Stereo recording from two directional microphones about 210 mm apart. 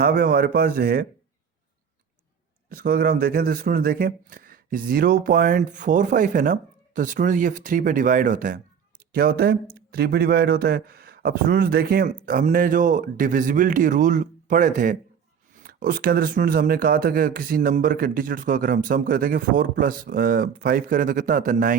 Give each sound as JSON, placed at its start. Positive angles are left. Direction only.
{"t": 0.0, "sound": "speech", "side_deg": -45}
{"t": 2.6, "sound": "speech", "side_deg": -45}